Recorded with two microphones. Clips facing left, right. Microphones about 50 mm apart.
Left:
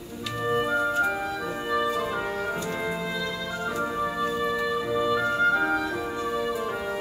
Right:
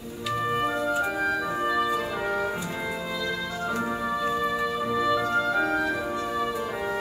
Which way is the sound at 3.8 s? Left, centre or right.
Centre.